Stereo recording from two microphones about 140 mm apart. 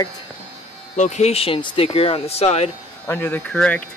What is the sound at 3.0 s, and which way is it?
Speech, 15° left (ahead or behind).